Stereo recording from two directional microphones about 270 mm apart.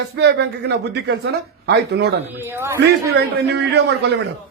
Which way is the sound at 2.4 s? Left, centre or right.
Centre.